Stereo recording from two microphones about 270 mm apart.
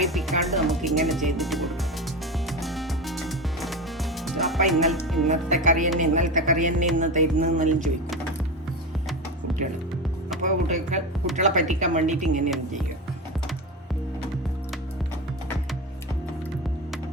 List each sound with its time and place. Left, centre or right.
0.0 s speech: centre
2.5 s music: centre
4.7 s speech: centre
5.6 s speech: right
10.4 s speech: right